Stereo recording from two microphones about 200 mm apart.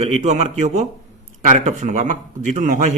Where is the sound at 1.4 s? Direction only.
40° right (ahead or behind).